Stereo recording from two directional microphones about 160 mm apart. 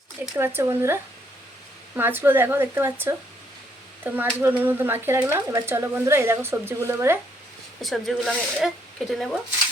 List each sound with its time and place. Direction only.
0.3 s speech: 15° right (ahead or behind)
2.0 s speech: 15° right (ahead or behind)
7.8 s speech: centre (ahead or behind)